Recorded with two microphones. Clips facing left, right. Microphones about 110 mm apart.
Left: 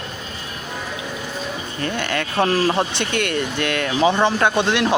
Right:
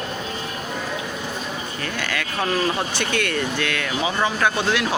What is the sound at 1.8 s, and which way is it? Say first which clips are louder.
Speech: left 6 dB; 25° left (ahead or behind).